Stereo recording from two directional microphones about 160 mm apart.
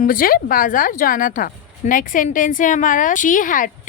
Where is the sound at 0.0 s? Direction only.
60° left (ahead or behind).